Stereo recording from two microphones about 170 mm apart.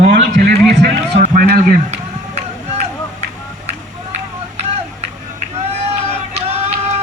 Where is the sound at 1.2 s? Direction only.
60° right (ahead or behind).